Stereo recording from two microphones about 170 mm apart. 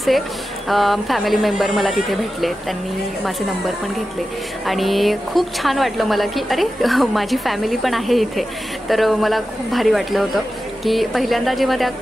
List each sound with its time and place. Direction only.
0.7 s a woman's voice: centre (ahead or behind)
4.6 s a woman's voice: centre (ahead or behind)